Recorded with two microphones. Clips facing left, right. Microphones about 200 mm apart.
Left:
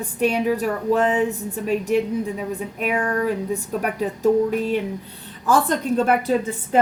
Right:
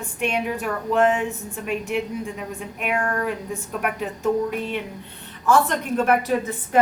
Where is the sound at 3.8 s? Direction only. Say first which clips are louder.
Left 3 dB; 35° left (ahead or behind).